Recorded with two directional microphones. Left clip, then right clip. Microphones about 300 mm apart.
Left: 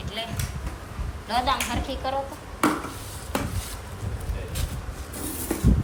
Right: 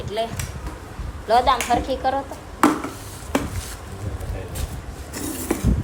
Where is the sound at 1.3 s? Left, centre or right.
Centre.